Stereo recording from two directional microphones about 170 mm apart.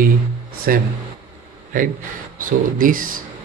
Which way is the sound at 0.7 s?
60° right (ahead or behind).